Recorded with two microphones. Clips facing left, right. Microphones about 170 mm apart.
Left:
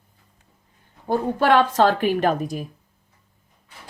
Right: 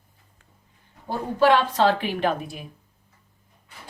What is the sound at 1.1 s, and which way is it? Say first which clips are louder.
A woman's voice: left 1 dB; 50° left (ahead or behind).